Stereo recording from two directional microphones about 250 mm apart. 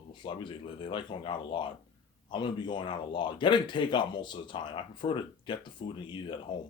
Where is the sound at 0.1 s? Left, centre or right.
Centre.